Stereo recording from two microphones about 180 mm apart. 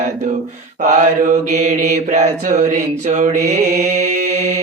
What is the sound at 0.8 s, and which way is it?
Mantra, 40° right (ahead or behind).